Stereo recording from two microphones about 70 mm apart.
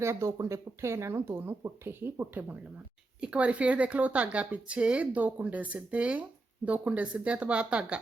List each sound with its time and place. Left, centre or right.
0.0 s speech: right
3.2 s speech: centre